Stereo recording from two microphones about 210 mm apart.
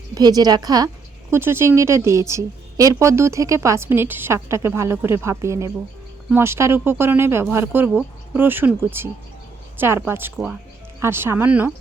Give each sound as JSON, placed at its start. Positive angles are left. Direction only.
{"t": 0.1, "sound": "a woman's voice", "side_deg": -20}